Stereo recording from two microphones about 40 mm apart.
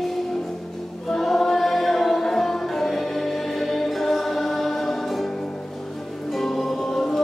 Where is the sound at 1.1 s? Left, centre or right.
Centre.